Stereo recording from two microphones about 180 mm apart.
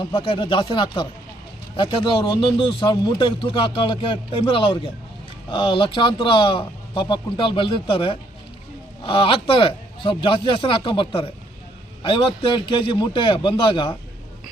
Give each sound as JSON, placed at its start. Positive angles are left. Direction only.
{"t": 0.0, "sound": "speech", "side_deg": 30}